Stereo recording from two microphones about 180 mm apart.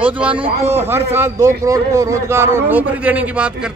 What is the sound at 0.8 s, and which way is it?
A man's voice, 10° right (ahead or behind).